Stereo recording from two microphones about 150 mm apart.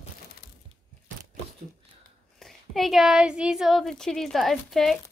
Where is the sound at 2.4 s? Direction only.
Centre (ahead or behind).